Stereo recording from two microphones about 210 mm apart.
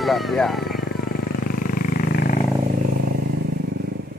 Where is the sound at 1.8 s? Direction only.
45° left (ahead or behind).